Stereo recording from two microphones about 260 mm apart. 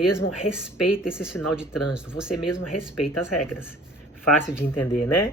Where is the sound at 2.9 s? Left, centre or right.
Left.